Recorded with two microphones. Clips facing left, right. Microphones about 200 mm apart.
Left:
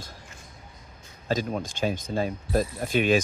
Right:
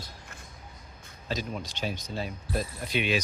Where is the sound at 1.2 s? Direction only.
50° left (ahead or behind).